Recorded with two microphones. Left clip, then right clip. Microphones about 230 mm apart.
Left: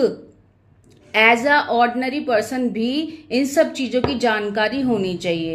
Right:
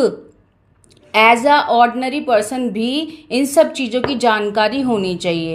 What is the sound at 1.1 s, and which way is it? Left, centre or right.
A woman's voice, right.